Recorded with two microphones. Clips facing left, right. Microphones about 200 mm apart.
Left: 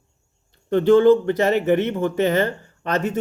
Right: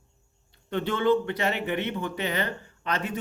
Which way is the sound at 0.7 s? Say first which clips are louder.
Left 10 dB; 40° left (ahead or behind).